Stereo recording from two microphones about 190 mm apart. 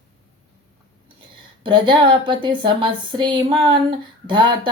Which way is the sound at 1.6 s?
25° right (ahead or behind).